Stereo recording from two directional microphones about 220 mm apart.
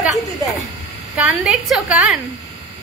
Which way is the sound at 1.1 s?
5° right (ahead or behind).